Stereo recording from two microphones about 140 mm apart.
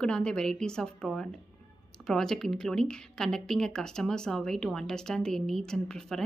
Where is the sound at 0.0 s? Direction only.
5° left (ahead or behind).